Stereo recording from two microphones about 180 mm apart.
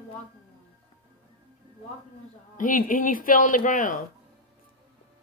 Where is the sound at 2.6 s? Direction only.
50° left (ahead or behind).